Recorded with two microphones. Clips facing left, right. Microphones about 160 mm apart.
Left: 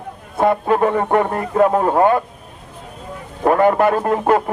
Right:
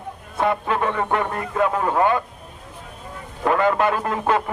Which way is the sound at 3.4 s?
30° left (ahead or behind).